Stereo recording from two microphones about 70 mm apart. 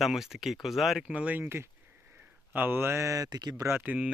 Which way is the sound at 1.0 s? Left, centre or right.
Centre.